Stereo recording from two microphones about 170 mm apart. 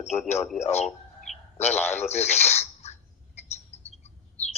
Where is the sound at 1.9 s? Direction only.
40° left (ahead or behind).